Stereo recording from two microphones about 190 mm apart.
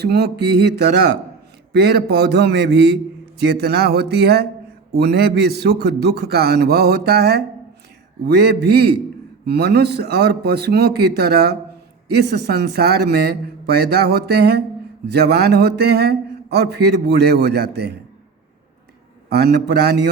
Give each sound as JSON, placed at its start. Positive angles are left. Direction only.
{"t": 0.0, "sound": "speech", "side_deg": -60}
{"t": 19.3, "sound": "speech", "side_deg": -60}